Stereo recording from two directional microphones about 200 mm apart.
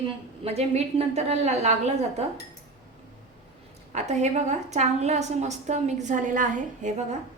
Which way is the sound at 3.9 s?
35° right (ahead or behind).